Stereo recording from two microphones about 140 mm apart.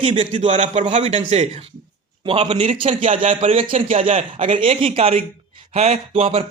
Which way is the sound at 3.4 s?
45° right (ahead or behind).